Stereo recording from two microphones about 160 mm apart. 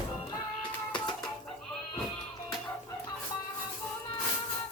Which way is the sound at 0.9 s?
25° left (ahead or behind).